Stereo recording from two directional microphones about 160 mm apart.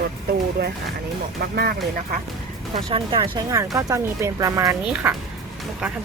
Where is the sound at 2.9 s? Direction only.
30° right (ahead or behind).